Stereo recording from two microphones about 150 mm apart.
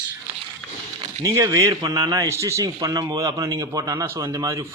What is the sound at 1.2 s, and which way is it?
A man's voice, 20° right (ahead or behind).